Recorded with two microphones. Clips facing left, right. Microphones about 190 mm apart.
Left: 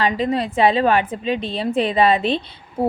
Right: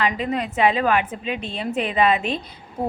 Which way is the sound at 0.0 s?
30° left (ahead or behind).